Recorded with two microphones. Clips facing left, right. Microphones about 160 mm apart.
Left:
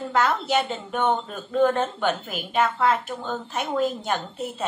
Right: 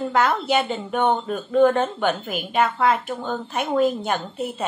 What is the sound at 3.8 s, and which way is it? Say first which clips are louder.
Speech: right 4 dB; 60° right (ahead or behind).